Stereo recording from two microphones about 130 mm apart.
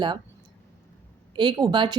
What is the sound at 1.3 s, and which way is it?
Speech, 40° right (ahead or behind).